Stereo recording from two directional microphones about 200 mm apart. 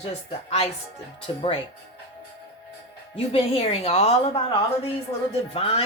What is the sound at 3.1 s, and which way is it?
A woman's voice, 30° left (ahead or behind).